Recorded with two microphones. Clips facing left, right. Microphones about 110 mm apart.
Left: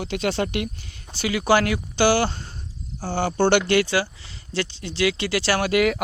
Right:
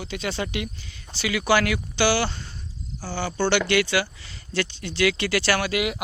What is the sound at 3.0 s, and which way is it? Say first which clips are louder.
Speech: left 5 dB; 60° left (ahead or behind).